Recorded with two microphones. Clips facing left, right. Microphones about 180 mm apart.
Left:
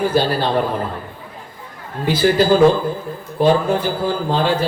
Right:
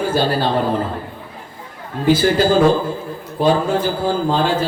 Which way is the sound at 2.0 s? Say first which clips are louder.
Right 1 dB; 45° right (ahead or behind).